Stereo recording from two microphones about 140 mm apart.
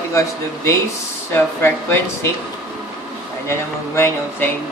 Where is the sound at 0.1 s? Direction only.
20° left (ahead or behind).